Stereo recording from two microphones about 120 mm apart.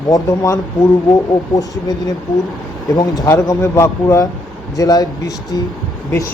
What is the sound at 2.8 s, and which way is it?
Speech, 35° left (ahead or behind).